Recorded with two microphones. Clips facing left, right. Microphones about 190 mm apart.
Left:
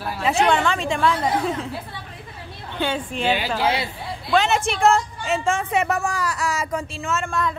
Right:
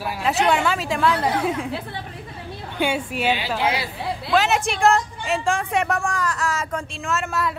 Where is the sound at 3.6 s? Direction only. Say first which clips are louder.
Left 1 dB; 30° left (ahead or behind).